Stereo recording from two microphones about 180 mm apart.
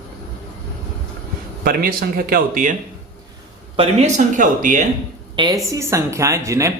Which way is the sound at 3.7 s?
35° right (ahead or behind).